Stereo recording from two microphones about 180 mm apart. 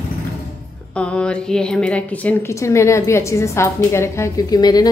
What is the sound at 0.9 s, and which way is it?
A woman's voice, 5° left (ahead or behind).